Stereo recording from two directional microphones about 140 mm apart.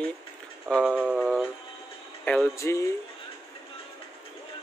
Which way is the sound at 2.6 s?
20° left (ahead or behind).